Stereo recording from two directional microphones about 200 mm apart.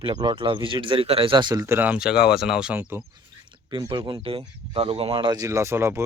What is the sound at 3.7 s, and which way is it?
Speech, 25° right (ahead or behind).